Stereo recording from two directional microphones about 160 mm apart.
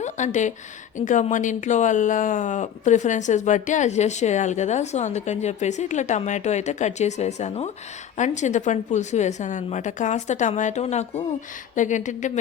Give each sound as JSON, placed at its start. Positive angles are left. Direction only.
{"t": 0.0, "sound": "speech", "side_deg": 50}